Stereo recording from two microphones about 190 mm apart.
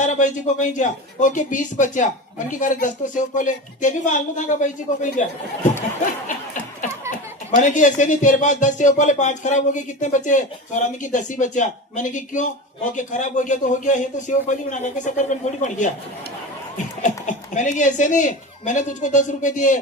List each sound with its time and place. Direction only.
0.0 s speech: 40° left (ahead or behind)
7.5 s speech: 40° left (ahead or behind)